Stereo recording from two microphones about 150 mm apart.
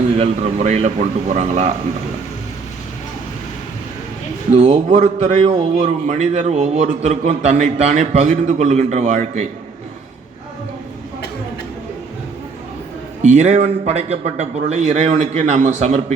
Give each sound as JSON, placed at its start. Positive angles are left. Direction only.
{"t": 0.2, "sound": "a man's voice", "side_deg": -45}
{"t": 4.5, "sound": "a man's voice", "side_deg": -50}
{"t": 13.2, "sound": "a man's voice", "side_deg": -45}